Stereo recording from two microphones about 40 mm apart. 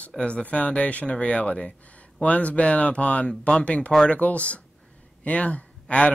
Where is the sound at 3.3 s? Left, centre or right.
Left.